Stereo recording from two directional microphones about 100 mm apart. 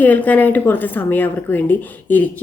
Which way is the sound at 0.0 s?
15° left (ahead or behind).